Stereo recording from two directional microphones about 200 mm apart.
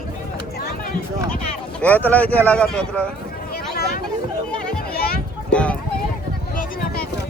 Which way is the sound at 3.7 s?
50° left (ahead or behind).